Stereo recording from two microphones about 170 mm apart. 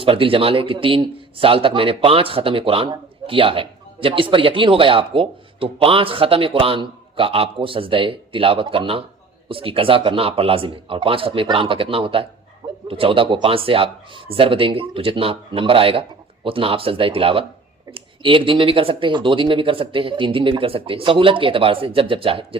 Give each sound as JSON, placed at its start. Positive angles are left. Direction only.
{"t": 0.0, "sound": "a man's voice", "side_deg": -30}